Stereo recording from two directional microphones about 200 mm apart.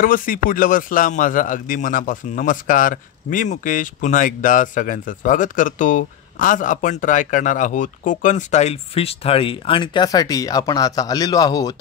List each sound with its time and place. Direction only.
0.0 s a man's voice: 45° left (ahead or behind); by 11.7 s 20° left (ahead or behind)